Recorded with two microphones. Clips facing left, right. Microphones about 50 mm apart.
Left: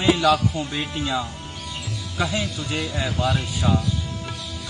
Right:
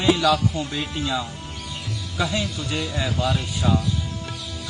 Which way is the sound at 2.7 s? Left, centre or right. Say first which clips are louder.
Even; centre.